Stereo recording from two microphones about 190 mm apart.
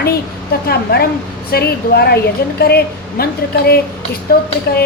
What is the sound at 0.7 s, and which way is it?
Speech, 55° left (ahead or behind).